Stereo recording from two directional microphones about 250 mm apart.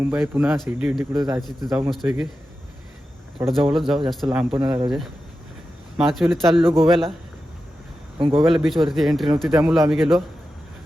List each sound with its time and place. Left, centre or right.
0.0 s speech: centre
1.1 s speech: centre
1.6 s speech: centre
3.4 s speech: centre
4.6 s speech: centre
6.0 s speech: centre
8.4 s speech: centre